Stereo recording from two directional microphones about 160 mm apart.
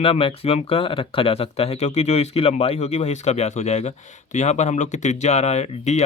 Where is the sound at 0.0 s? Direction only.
35° left (ahead or behind).